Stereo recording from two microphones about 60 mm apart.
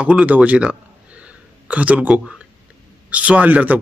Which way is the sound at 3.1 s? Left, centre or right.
Right.